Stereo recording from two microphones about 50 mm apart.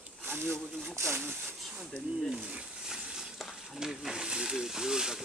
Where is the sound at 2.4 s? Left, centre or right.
Right.